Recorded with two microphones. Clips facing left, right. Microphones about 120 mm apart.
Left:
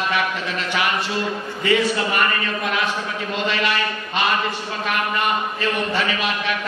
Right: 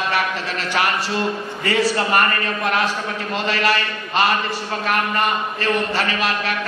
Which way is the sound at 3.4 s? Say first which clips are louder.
Right 2 dB; 40° right (ahead or behind).